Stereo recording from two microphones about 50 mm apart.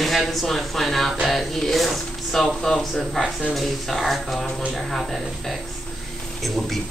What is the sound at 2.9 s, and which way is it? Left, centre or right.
Speech, centre.